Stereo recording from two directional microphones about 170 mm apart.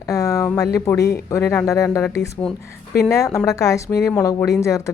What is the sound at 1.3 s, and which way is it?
Speech, 10° left (ahead or behind).